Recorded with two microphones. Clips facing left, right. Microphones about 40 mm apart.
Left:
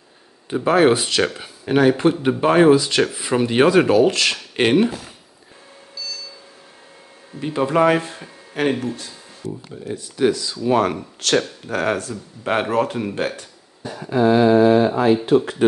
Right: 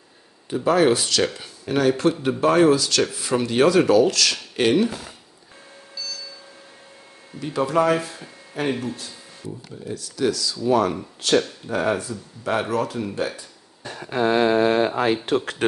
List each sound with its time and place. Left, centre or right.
0.5 s speech: left
7.3 s speech: left
8.6 s speech: left
9.8 s speech: left
11.2 s speech: left
12.1 s speech: left
13.8 s a sound: right
15.2 s speech: right